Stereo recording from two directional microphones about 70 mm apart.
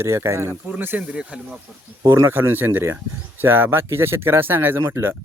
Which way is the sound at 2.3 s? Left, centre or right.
Right.